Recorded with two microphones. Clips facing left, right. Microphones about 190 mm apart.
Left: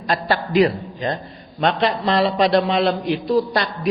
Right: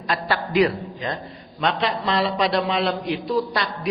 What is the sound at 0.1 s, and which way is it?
A man's voice, 35° left (ahead or behind).